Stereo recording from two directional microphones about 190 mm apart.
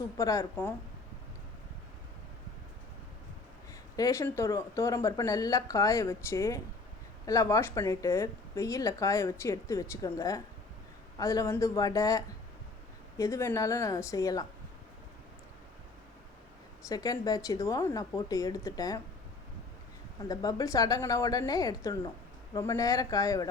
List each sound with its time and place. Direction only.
0.2 s speech: 15° left (ahead or behind)
3.9 s speech: 15° left (ahead or behind)
16.9 s speech: 20° left (ahead or behind)
20.2 s a woman's voice: 20° left (ahead or behind)